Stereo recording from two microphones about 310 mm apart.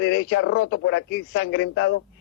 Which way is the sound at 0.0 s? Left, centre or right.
Left.